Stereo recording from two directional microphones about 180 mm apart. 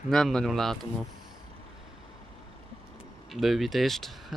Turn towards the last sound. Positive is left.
turn(degrees=0)  # may be behind; listen again after turning